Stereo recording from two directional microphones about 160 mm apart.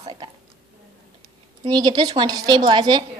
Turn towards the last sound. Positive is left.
turn(degrees=-25)  # may be behind; listen again after turning